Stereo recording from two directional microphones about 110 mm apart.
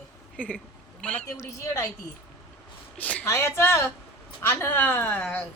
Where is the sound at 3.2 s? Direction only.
25° left (ahead or behind).